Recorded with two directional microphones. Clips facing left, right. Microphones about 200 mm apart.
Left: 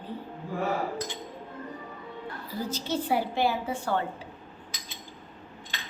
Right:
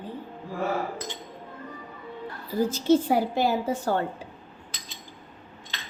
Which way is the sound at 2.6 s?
50° right (ahead or behind).